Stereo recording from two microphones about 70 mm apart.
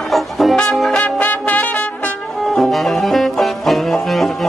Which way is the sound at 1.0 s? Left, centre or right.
Left.